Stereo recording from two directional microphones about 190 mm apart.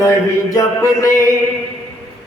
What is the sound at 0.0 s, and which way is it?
Mantra, 15° left (ahead or behind).